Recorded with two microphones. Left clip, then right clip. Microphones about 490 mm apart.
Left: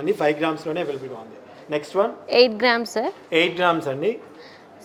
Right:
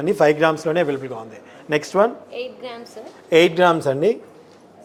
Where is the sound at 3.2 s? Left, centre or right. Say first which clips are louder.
Right 6 dB; right.